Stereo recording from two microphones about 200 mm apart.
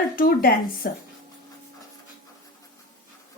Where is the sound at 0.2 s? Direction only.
45° left (ahead or behind).